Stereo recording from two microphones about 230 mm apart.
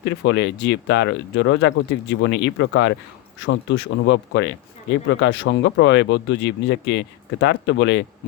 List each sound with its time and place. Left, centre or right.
0.0 s speech: left